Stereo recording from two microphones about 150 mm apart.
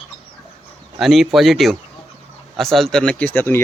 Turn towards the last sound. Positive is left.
turn(degrees=15)  # may be behind; listen again after turning